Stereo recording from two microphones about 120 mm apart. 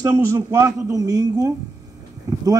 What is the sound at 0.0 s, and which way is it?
A man's voice, 25° right (ahead or behind).